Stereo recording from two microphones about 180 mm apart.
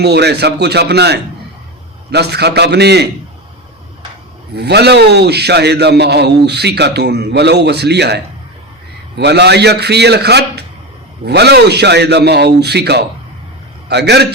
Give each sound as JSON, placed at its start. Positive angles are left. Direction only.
{"t": 0.0, "sound": "a man's voice", "side_deg": -65}
{"t": 4.5, "sound": "a man's voice", "side_deg": -65}